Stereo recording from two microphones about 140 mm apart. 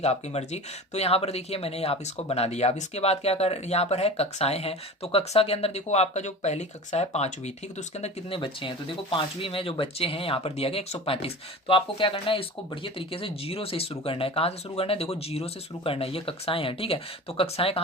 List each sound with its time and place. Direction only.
0.0 s speech: 50° left (ahead or behind)
8.4 s speech: 40° left (ahead or behind)